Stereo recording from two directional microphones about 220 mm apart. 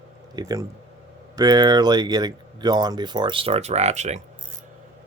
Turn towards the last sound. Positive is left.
turn(degrees=-30)  # may be behind; listen again after turning